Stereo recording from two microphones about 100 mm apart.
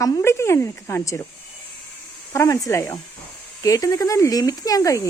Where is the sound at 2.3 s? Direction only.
30° left (ahead or behind).